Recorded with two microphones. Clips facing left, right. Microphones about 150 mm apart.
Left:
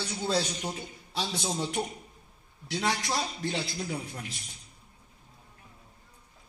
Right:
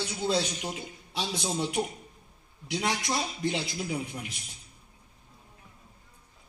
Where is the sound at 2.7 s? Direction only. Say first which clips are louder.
Even; 15° right (ahead or behind).